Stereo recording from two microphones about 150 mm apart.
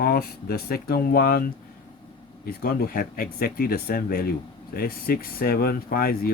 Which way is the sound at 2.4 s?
90° left.